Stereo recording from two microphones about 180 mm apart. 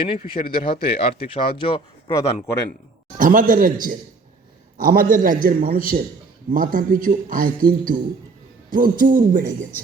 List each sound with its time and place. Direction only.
0.3 s speech: 30° left (ahead or behind)
3.2 s speech: 50° right (ahead or behind)